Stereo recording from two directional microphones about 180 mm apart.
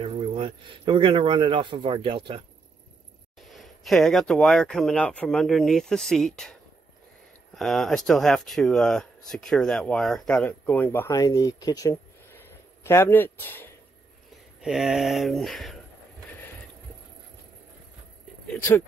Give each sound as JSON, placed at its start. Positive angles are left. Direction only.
{"t": 0.0, "sound": "speech", "side_deg": -30}
{"t": 3.3, "sound": "speech", "side_deg": 0}
{"t": 7.5, "sound": "speech", "side_deg": 0}
{"t": 14.6, "sound": "speech", "side_deg": 0}
{"t": 18.5, "sound": "speech", "side_deg": 15}